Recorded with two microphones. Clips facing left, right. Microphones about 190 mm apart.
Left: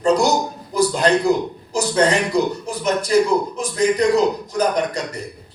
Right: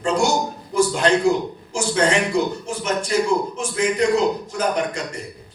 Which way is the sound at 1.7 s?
35° left (ahead or behind).